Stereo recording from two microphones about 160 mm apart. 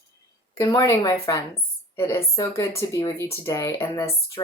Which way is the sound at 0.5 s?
20° left (ahead or behind).